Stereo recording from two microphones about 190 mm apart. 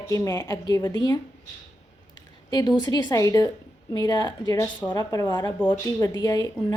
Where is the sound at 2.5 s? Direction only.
20° left (ahead or behind).